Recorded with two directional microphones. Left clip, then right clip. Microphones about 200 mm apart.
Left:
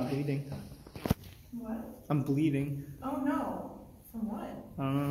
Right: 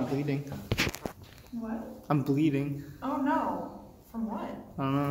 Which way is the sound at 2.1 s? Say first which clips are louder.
Right 3 dB; 5° right (ahead or behind).